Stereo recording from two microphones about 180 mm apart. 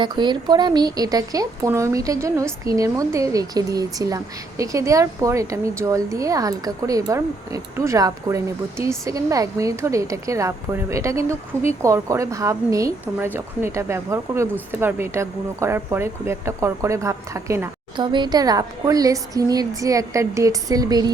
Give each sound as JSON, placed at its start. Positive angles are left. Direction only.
{"t": 0.0, "sound": "speech", "side_deg": -25}